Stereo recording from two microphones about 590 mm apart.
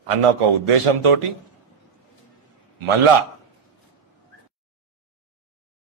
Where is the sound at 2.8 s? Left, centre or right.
Right.